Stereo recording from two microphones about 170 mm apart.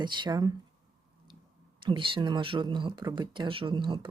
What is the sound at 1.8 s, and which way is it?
Speech, 30° right (ahead or behind).